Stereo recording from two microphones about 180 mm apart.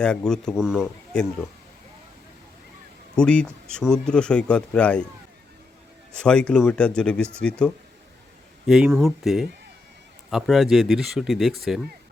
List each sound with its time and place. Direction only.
0.0 s speech: 5° left (ahead or behind)
3.2 s speech: 5° left (ahead or behind)
6.2 s speech: 5° left (ahead or behind)